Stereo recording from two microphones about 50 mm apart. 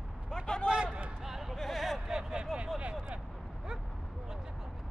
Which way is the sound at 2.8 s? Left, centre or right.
Right.